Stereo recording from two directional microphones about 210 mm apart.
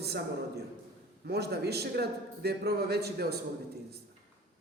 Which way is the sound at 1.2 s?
50° right (ahead or behind).